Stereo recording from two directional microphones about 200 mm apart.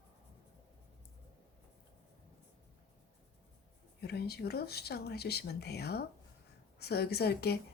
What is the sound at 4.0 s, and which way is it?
Speech, 55° left (ahead or behind).